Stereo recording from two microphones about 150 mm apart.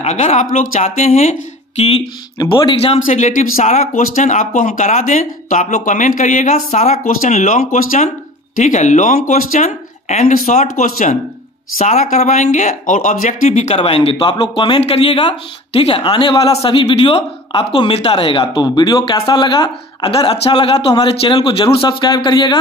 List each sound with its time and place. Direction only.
0.0 s speech: 45° left (ahead or behind)
2.3 s speech: 30° left (ahead or behind)
3.1 s speech: 55° left (ahead or behind)
13.5 s speech: 45° left (ahead or behind)